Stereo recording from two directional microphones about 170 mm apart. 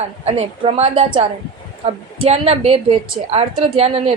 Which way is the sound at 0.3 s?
35° right (ahead or behind).